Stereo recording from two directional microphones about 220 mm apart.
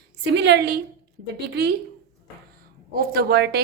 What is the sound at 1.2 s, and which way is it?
Speech, 50° right (ahead or behind).